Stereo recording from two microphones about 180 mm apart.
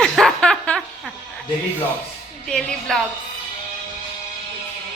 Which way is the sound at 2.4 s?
5° left (ahead or behind).